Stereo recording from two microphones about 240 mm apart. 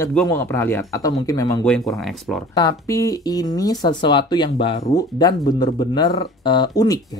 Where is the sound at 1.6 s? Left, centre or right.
Centre.